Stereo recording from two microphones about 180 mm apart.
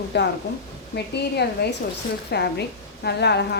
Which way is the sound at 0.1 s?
75° left (ahead or behind).